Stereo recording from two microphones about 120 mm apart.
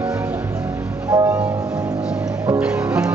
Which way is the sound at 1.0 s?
30° right (ahead or behind).